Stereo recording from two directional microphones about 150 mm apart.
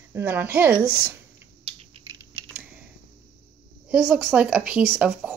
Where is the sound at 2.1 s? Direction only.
25° right (ahead or behind).